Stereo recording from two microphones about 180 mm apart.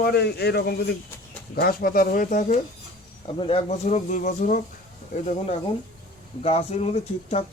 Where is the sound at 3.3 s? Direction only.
30° left (ahead or behind); by 4.6 s 45° left (ahead or behind).